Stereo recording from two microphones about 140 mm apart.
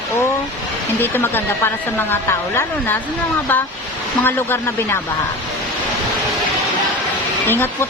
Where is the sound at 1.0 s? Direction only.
15° left (ahead or behind).